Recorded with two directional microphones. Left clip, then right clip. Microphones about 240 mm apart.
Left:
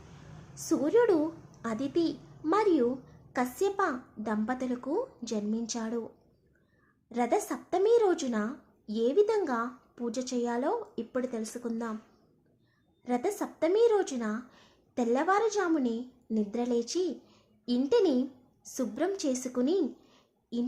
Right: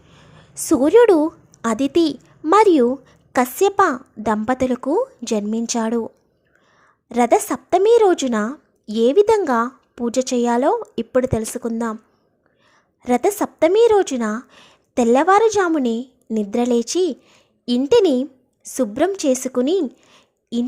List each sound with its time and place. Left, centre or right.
0.5 s a woman's voice: right
7.1 s a woman's voice: right
13.0 s a woman's voice: right